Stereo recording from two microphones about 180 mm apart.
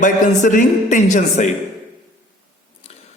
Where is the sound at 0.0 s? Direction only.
45° left (ahead or behind).